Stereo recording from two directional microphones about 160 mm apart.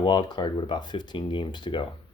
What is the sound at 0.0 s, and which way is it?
Speech, 30° left (ahead or behind).